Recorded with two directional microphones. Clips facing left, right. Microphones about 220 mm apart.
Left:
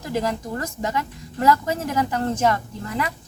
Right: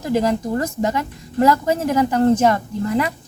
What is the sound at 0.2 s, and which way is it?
Speech, 30° right (ahead or behind).